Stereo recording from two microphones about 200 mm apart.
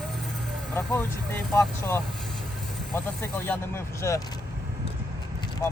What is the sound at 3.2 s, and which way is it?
Speech, 10° left (ahead or behind).